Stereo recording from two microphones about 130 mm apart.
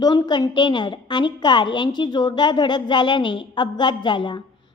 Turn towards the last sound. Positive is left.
turn(degrees=35)  # may be behind; listen again after turning